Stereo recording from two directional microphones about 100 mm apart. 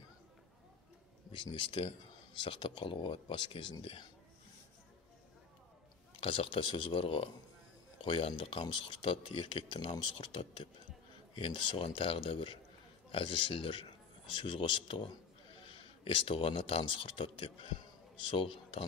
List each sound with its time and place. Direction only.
1.3 s speech: 50° left (ahead or behind)
6.2 s speech: 65° left (ahead or behind)